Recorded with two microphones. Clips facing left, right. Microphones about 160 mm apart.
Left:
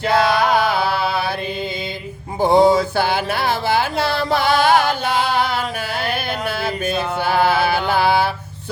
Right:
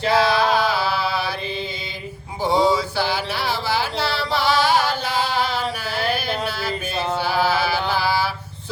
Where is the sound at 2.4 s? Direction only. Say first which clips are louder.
Left 5 dB; 50° left (ahead or behind).